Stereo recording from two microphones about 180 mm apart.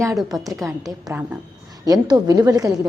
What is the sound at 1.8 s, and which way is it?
Speech, 20° right (ahead or behind).